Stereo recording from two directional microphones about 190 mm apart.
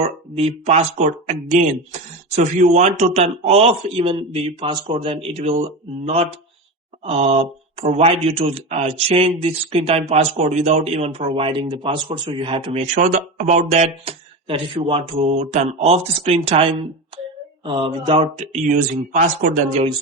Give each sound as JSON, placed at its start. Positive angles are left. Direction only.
{"t": 0.3, "sound": "speech", "side_deg": -35}
{"t": 7.0, "sound": "speech", "side_deg": -35}
{"t": 12.8, "sound": "speech", "side_deg": -40}
{"t": 18.7, "sound": "speech", "side_deg": -45}